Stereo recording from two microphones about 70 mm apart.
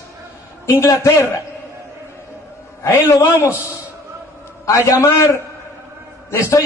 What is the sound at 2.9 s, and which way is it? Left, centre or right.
Speech, left.